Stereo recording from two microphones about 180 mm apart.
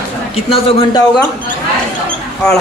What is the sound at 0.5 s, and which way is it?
Speech, 30° left (ahead or behind).